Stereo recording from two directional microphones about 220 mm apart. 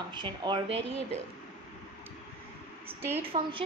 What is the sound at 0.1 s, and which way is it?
Speech, 20° right (ahead or behind).